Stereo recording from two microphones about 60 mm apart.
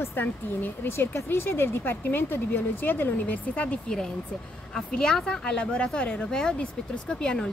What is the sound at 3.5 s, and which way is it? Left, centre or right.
Speech, left.